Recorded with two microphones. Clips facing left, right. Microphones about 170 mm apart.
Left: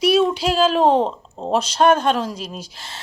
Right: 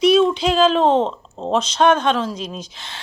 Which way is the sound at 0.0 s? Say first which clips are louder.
Right 2 dB; 10° left (ahead or behind).